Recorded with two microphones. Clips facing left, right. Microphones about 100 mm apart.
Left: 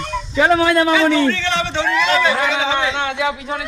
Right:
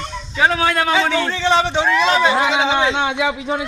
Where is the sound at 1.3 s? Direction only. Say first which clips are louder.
Right 3 dB; 20° right (ahead or behind).